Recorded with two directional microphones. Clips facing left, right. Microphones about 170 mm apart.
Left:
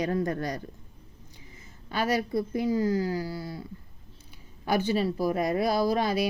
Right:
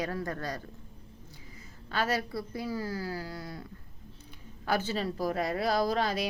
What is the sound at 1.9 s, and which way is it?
Speech, 15° left (ahead or behind).